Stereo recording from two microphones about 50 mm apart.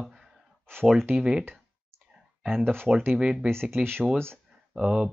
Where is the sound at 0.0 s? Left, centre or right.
Centre.